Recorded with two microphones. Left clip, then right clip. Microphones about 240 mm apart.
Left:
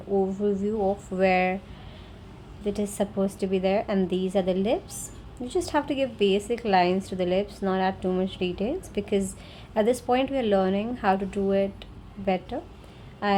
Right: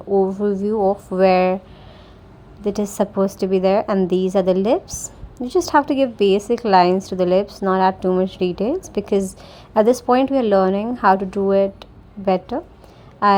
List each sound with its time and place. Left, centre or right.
0.1 s a woman's voice: right
2.6 s a woman's voice: right